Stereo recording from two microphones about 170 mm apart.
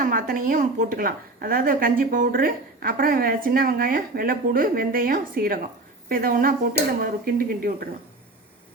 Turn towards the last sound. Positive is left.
turn(degrees=-60)  # may be behind; listen again after turning